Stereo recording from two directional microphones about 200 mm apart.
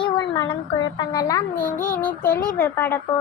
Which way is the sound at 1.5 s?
45° left (ahead or behind).